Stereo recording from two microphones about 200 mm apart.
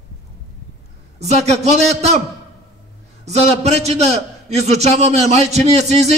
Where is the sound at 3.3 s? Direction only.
35° right (ahead or behind).